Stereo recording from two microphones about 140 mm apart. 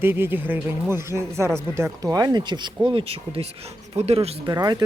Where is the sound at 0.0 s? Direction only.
15° right (ahead or behind).